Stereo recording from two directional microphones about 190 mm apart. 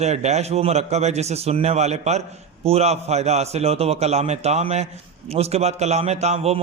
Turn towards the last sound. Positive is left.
turn(degrees=-35)  # may be behind; listen again after turning